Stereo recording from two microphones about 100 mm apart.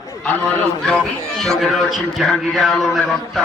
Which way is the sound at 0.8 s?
10° left (ahead or behind).